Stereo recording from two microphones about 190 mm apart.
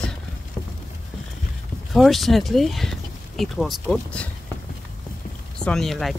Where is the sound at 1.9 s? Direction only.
Centre (ahead or behind).